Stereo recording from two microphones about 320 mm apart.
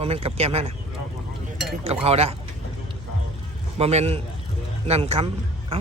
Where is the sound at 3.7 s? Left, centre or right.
Centre.